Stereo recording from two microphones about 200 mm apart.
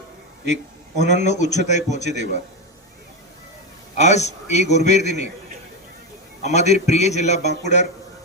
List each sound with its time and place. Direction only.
0.4 s a man's voice: 35° left (ahead or behind)
3.9 s a man's voice: 35° left (ahead or behind)
6.4 s a man's voice: 35° left (ahead or behind)